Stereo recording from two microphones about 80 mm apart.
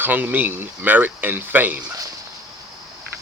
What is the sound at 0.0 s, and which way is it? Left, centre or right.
Speech, right.